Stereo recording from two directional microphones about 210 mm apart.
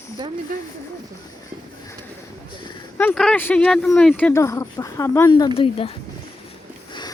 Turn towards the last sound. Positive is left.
turn(degrees=25)  # may be behind; listen again after turning